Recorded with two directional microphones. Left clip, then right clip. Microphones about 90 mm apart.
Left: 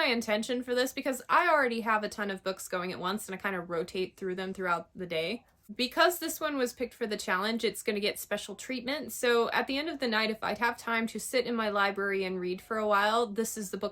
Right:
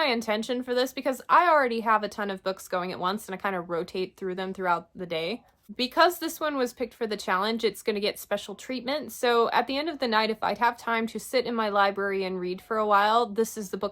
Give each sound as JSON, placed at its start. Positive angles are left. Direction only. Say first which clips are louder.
{"t": 0.0, "sound": "speech", "louder": "right 3 dB", "side_deg": -40}